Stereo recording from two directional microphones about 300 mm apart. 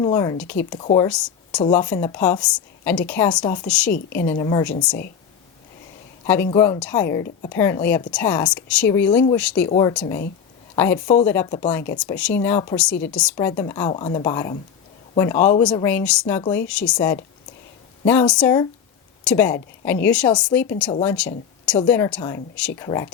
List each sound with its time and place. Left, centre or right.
0.0 s a woman's voice: centre
6.2 s a woman's voice: centre
9.6 s speech: centre
9.9 s a woman's voice: centre